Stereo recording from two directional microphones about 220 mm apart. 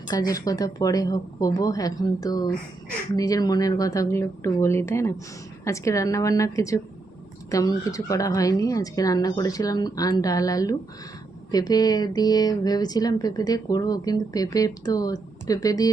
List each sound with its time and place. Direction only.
0.1 s speech: 15° left (ahead or behind)